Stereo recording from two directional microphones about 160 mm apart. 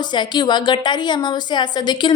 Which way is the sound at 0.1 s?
25° left (ahead or behind).